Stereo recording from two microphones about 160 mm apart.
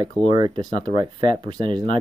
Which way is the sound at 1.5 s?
30° right (ahead or behind).